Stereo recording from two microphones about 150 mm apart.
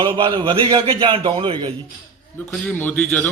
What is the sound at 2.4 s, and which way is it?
Speech, 15° left (ahead or behind).